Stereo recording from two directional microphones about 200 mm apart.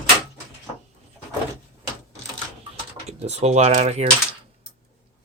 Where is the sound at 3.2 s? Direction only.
30° right (ahead or behind).